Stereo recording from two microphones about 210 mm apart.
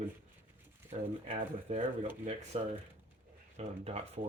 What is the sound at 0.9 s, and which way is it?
Speech, 35° right (ahead or behind).